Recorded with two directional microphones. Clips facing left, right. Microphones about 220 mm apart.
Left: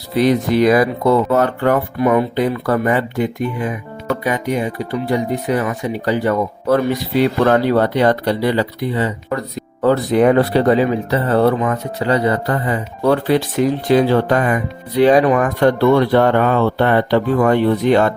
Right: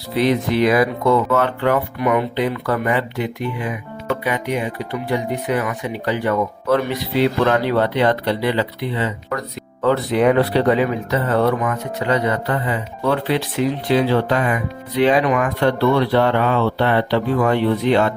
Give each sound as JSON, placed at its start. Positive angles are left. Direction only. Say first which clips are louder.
{"t": 0.2, "sound": "speech", "louder": "left 3 dB", "side_deg": 40}
{"t": 2.0, "sound": "speech", "louder": "left 4 dB", "side_deg": 30}
{"t": 2.3, "sound": "speech", "louder": "left 3 dB", "side_deg": 45}